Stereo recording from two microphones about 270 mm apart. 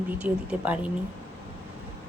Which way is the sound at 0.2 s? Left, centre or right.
Centre.